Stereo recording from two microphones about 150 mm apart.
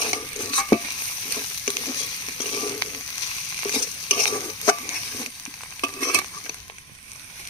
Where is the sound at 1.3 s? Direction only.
30° left (ahead or behind).